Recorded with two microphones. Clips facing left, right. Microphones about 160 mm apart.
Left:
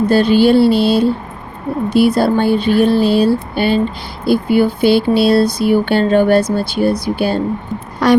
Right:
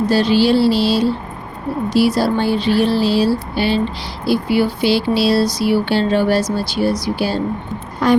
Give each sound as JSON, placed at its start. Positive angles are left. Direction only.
{"t": 0.1, "sound": "speech", "side_deg": 55}
{"t": 8.0, "sound": "speech", "side_deg": 75}